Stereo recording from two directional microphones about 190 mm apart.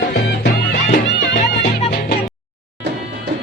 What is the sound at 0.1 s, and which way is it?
Music, 55° left (ahead or behind).